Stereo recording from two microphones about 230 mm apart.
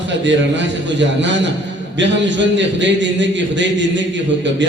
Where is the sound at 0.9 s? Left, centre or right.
Right.